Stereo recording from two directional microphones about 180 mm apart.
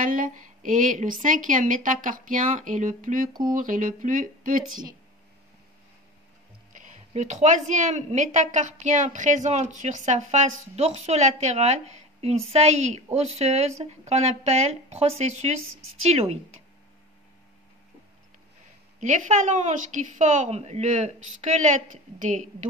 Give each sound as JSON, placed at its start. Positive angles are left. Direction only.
{"t": 0.0, "sound": "a woman's voice", "side_deg": -45}
{"t": 6.7, "sound": "a woman's voice", "side_deg": -45}
{"t": 18.9, "sound": "a woman's voice", "side_deg": -45}